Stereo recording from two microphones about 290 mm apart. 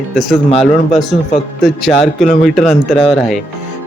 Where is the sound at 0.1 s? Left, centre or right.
Centre.